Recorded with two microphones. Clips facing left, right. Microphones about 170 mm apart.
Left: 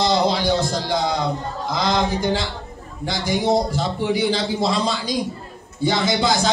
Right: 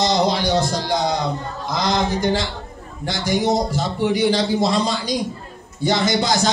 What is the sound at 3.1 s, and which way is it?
Speech, 45° right (ahead or behind).